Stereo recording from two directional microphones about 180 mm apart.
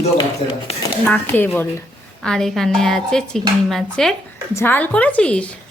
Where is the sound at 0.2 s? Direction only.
30° left (ahead or behind).